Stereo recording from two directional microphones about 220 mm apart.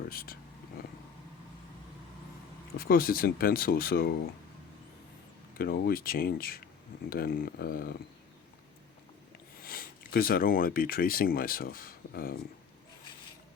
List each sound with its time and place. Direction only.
0.1 s speech: 45° left (ahead or behind)
2.7 s speech: 40° left (ahead or behind)
5.5 s speech: 45° left (ahead or behind)
9.6 s speech: 40° left (ahead or behind)